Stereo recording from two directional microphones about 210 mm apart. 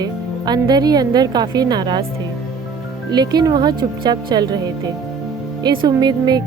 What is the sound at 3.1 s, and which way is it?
A woman's voice, 20° right (ahead or behind).